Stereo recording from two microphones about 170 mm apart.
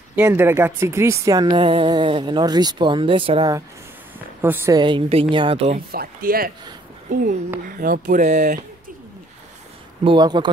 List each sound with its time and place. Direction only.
0.1 s speech: 10° right (ahead or behind); by 3.5 s 30° right (ahead or behind)
4.4 s a woman's voice: 15° right (ahead or behind)
4.7 s a woman's voice: 30° right (ahead or behind)
5.9 s speech: 60° right (ahead or behind)
7.1 s speech: 45° right (ahead or behind)
10.0 s speech: 25° right (ahead or behind)